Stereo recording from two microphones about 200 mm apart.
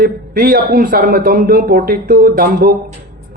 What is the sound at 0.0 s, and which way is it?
A man's voice, 45° right (ahead or behind).